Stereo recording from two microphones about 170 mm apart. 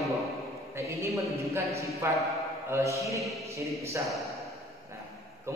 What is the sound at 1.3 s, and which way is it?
Mantra, 15° right (ahead or behind).